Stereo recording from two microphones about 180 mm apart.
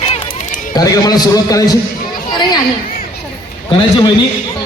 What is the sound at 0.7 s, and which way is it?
A man's voice, 20° left (ahead or behind).